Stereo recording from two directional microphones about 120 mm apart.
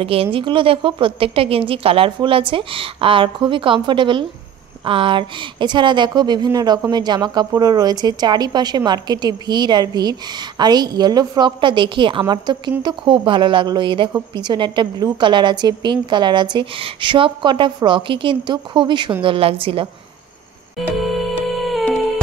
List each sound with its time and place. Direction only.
0.0 s a woman's voice: 50° right (ahead or behind)
21.0 s music: centre (ahead or behind)